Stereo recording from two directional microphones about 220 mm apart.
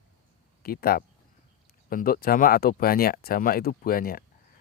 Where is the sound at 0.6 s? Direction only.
40° left (ahead or behind).